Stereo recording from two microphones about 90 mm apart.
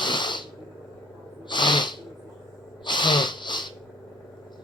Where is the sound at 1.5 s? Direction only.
55° left (ahead or behind).